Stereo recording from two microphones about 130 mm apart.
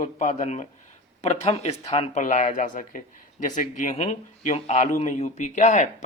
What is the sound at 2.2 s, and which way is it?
Speech, 70° left (ahead or behind).